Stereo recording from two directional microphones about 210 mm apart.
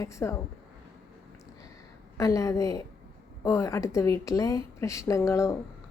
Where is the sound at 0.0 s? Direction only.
15° left (ahead or behind).